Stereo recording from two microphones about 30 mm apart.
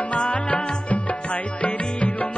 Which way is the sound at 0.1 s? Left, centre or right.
Left.